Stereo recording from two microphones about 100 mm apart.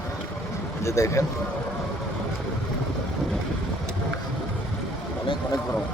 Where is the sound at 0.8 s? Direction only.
30° left (ahead or behind).